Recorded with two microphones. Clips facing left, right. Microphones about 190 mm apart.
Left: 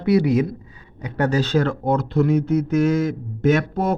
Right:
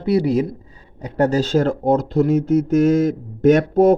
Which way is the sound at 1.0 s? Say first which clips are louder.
Right 3 dB; 40° right (ahead or behind).